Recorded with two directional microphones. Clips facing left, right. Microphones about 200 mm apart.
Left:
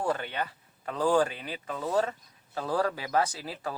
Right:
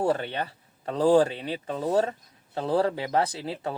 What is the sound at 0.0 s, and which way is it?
Speech, 30° right (ahead or behind).